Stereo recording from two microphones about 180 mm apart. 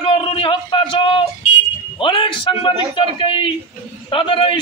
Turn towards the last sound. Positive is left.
turn(degrees=30)  # may be behind; listen again after turning